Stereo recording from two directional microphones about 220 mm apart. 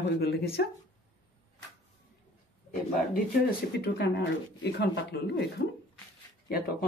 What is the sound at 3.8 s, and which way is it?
Speech, 50° left (ahead or behind).